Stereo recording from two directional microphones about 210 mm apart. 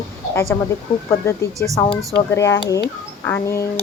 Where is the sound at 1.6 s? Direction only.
10° left (ahead or behind).